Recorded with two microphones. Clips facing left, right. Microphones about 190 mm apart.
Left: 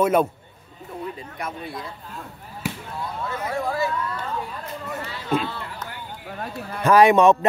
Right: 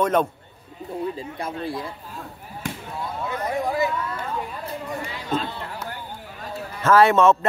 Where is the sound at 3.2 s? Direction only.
15° right (ahead or behind).